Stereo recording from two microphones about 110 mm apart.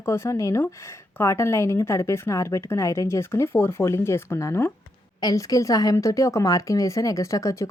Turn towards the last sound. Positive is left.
turn(degrees=30)  # may be behind; listen again after turning